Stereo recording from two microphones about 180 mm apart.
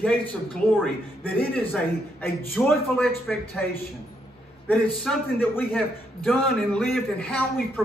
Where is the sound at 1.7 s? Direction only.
10° left (ahead or behind).